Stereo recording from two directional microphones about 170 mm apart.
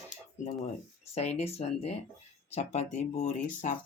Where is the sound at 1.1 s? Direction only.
40° left (ahead or behind).